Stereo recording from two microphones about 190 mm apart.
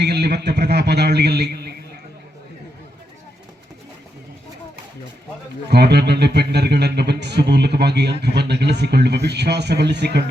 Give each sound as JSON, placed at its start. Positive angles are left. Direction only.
{"t": 0.0, "sound": "speech", "side_deg": -60}
{"t": 5.7, "sound": "speech", "side_deg": -60}